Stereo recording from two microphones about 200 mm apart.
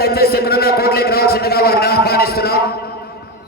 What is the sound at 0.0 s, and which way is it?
A man's voice, 50° left (ahead or behind).